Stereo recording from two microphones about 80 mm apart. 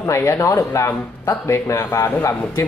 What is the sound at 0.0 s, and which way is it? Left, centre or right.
Speech, left.